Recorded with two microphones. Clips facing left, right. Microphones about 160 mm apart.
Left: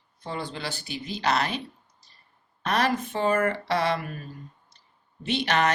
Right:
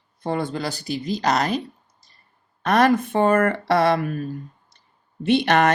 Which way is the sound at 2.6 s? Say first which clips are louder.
Right 8 dB; 50° right (ahead or behind).